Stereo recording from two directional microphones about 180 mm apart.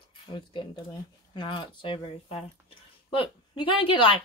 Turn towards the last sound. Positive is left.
turn(degrees=30)  # may be behind; listen again after turning